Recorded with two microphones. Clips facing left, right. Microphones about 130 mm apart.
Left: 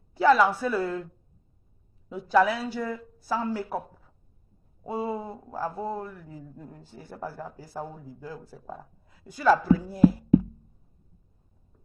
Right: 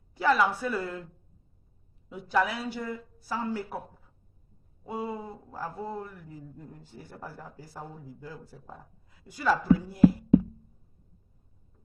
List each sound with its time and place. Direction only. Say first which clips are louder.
0.2 s speech: left 5 dB; 35° left (ahead or behind)
2.0 s speech: left 5 dB; 30° left (ahead or behind)
4.8 s speech: left 4 dB; 30° left (ahead or behind)